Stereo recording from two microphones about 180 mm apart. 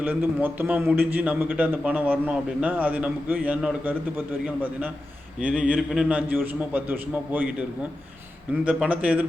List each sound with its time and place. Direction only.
0.0 s a man's voice: 10° right (ahead or behind)
8.6 s a man's voice: 5° right (ahead or behind)